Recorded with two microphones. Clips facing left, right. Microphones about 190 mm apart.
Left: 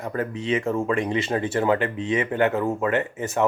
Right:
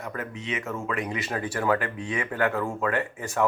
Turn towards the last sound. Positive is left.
turn(degrees=20)  # may be behind; listen again after turning